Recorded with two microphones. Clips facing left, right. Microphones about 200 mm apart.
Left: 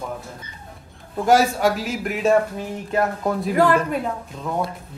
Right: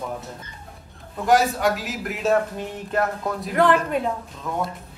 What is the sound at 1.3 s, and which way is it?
A woman's voice, centre (ahead or behind).